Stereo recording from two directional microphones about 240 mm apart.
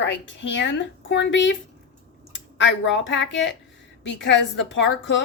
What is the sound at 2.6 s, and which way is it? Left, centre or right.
A woman's voice, left.